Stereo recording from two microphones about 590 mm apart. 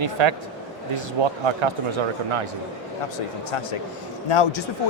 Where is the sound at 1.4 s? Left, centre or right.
Right.